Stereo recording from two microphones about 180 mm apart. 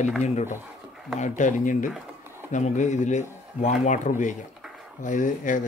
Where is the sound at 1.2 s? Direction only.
45° left (ahead or behind).